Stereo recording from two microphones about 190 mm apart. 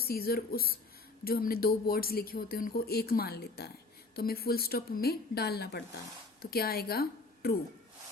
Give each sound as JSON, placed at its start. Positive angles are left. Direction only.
{"t": 0.0, "sound": "a woman's voice", "side_deg": 55}